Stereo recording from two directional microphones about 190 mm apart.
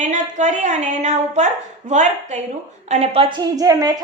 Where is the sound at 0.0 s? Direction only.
40° right (ahead or behind).